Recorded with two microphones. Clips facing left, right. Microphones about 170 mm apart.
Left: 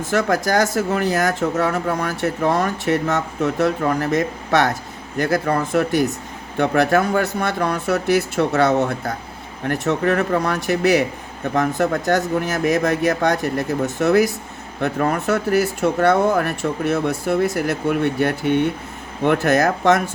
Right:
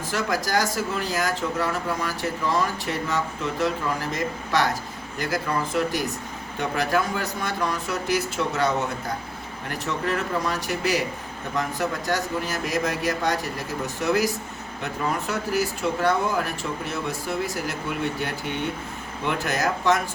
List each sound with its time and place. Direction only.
0.1 s speech: 60° left (ahead or behind)